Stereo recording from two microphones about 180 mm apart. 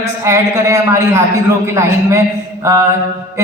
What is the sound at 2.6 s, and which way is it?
Mantra, 15° right (ahead or behind).